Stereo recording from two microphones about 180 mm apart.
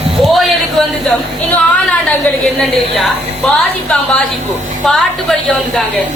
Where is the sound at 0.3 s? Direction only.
Centre (ahead or behind).